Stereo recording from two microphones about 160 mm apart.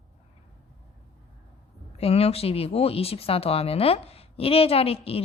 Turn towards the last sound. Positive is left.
turn(degrees=35)  # may be behind; listen again after turning